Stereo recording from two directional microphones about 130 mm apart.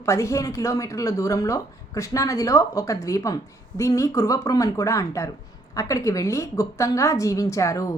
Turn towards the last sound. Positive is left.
turn(degrees=25)  # may be behind; listen again after turning